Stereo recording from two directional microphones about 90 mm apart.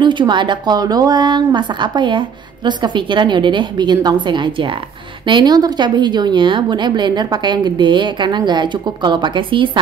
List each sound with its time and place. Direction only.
0.0 s a woman's voice: 60° right (ahead or behind)
5.2 s a woman's voice: 55° right (ahead or behind)